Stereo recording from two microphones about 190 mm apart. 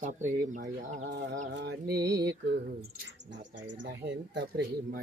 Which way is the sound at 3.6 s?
65° right (ahead or behind).